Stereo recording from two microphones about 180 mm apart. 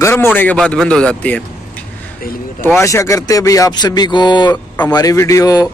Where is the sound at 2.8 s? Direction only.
15° left (ahead or behind).